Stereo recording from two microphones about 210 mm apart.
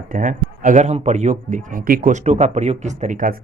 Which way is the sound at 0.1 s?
40° right (ahead or behind).